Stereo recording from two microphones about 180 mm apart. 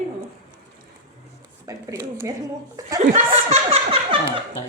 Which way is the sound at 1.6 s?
20° right (ahead or behind).